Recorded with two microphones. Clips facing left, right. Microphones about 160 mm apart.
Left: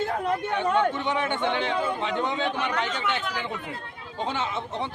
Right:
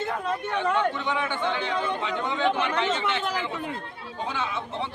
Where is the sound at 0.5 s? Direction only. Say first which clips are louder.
Even; 20° left (ahead or behind).